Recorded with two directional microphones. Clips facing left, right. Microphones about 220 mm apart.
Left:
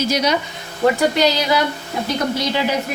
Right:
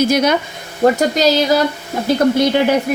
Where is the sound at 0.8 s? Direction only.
40° right (ahead or behind).